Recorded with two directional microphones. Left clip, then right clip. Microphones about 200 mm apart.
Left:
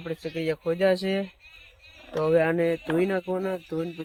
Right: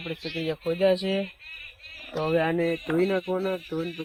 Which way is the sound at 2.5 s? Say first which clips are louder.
Left 1 dB; 25° left (ahead or behind).